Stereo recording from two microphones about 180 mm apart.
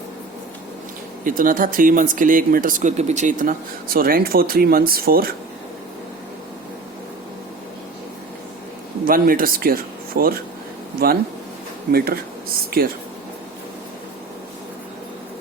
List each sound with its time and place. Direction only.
1.2 s speech: 50° right (ahead or behind)
9.0 s speech: 55° right (ahead or behind)
11.9 s speech: 55° right (ahead or behind)